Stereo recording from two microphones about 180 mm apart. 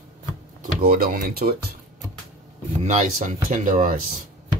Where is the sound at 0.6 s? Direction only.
55° right (ahead or behind).